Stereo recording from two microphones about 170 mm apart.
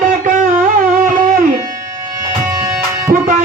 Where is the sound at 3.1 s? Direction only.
50° right (ahead or behind).